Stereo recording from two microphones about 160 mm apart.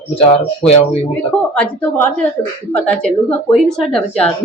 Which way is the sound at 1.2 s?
10° left (ahead or behind).